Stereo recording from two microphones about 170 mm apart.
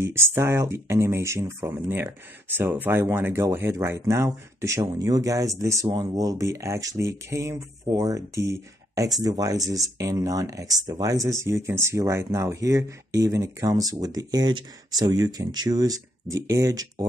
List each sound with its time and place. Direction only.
0.0 s speech: 15° right (ahead or behind)